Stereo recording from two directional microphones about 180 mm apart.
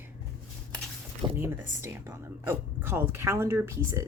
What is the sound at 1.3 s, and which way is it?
Speech, 10° right (ahead or behind).